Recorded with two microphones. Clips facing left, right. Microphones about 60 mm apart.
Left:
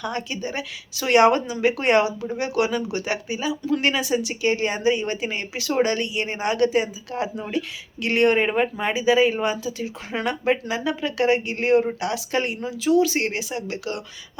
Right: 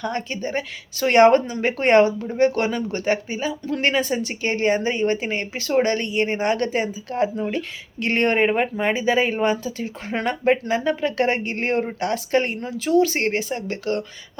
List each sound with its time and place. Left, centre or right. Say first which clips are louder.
0.0 s speech: right 2 dB; right
8.8 s speech: left 3 dB; right